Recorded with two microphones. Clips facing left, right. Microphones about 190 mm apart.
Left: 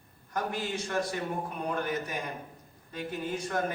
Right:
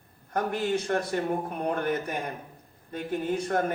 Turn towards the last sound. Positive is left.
turn(degrees=-55)  # may be behind; listen again after turning